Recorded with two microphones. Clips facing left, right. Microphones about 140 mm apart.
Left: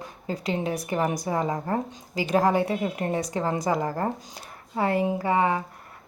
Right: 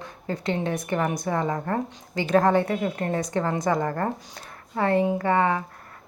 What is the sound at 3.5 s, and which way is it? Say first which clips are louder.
Speech: even; 30° left (ahead or behind).